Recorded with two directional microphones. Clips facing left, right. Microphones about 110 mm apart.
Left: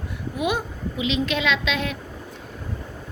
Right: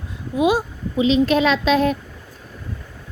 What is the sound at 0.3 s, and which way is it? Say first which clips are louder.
A woman's voice: right 7 dB; 25° right (ahead or behind).